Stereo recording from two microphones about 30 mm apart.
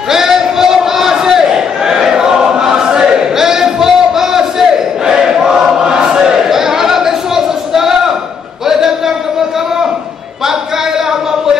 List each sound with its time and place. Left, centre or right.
0.1 s crowd: centre
2.6 s choir: right
3.3 s crowd: centre
5.3 s choir: centre
5.8 s choir: right
6.5 s a sound: centre